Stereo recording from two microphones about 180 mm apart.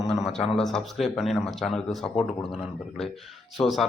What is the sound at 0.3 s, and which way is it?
Speech, 5° left (ahead or behind).